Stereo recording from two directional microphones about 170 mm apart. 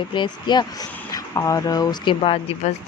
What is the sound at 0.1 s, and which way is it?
Speech, 25° left (ahead or behind).